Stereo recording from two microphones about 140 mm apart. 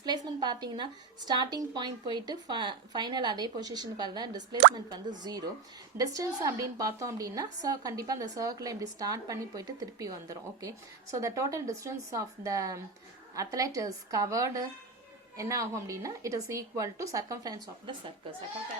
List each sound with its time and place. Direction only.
0.0 s a woman's voice: 30° right (ahead or behind)